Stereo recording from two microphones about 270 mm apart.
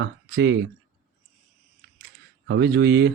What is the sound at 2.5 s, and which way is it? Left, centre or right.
Speech, right.